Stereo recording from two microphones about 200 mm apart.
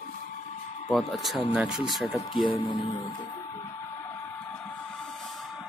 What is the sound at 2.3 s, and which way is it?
Speech, 25° left (ahead or behind).